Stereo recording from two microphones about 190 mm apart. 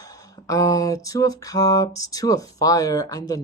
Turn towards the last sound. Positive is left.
turn(degrees=20)  # may be behind; listen again after turning